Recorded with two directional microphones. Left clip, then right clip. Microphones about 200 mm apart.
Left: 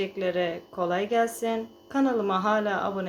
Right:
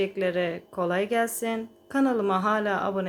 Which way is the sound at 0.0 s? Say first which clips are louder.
Right 1 dB; 25° right (ahead or behind).